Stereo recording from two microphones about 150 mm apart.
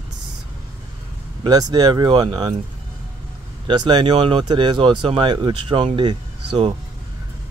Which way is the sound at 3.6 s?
30° right (ahead or behind).